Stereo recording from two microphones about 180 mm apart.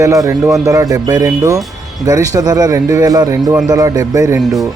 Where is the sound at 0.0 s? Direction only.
15° right (ahead or behind).